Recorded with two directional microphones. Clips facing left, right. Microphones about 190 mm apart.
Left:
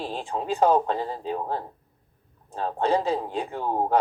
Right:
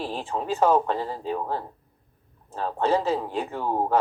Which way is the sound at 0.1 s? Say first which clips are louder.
Even; 15° left (ahead or behind).